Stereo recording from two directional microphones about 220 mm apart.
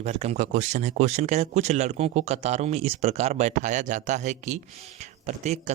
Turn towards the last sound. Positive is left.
turn(degrees=-30)  # may be behind; listen again after turning